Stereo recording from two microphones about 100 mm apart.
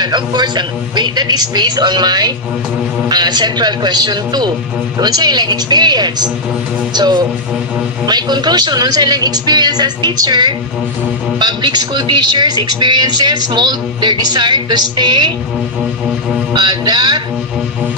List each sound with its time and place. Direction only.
0.0 s a man's voice: 50° right (ahead or behind)
16.5 s a man's voice: 45° right (ahead or behind)